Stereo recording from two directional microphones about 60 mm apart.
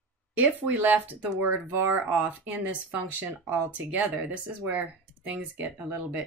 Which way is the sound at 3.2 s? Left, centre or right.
Right.